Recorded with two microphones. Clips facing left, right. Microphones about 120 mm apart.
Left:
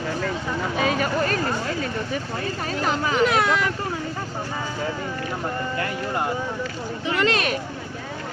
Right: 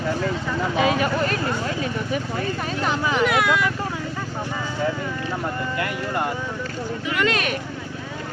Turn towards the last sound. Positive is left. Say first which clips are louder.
# left 1 dB
turn(degrees=35)  # may be behind; listen again after turning